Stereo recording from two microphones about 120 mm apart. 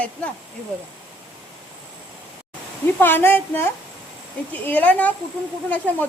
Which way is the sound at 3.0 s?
15° left (ahead or behind).